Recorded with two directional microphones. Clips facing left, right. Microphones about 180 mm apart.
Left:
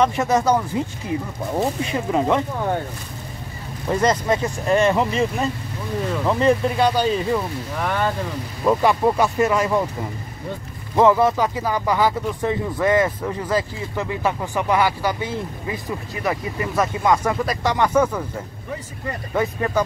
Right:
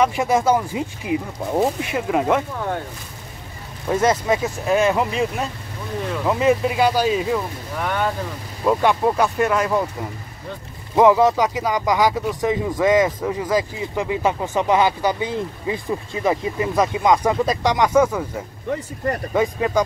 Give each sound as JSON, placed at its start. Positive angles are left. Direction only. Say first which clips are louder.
{"t": 0.0, "sound": "speech", "louder": "even", "side_deg": -10}
{"t": 3.9, "sound": "speech", "louder": "right 1 dB", "side_deg": -5}
{"t": 11.0, "sound": "speech", "louder": "right 2 dB", "side_deg": -15}
{"t": 19.3, "sound": "speech", "louder": "right 1 dB", "side_deg": -15}